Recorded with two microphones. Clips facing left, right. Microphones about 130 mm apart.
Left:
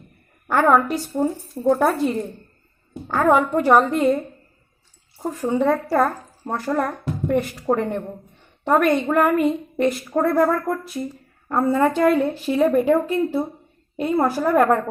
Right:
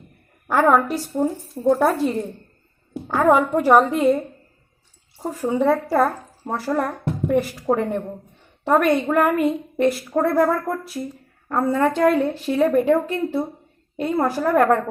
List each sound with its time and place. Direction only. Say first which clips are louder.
0.4 s a woman's voice: even; 5° right (ahead or behind)
5.2 s a woman's voice: even; 5° right (ahead or behind)